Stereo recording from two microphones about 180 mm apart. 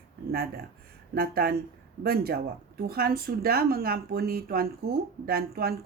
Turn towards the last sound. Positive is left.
turn(degrees=-60)  # may be behind; listen again after turning